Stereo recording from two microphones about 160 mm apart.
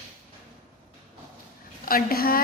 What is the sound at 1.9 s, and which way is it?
Speech, 65° left (ahead or behind).